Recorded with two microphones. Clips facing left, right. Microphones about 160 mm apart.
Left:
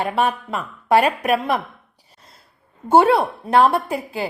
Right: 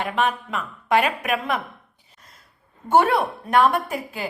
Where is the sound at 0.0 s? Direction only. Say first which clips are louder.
Left 3 dB; 35° left (ahead or behind).